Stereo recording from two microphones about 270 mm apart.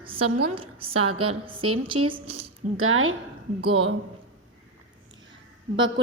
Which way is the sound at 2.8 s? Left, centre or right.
Right.